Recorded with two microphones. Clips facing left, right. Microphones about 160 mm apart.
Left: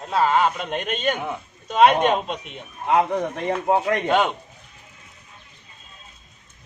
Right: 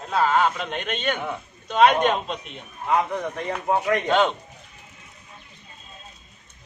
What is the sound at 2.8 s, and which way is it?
Speech, 30° left (ahead or behind).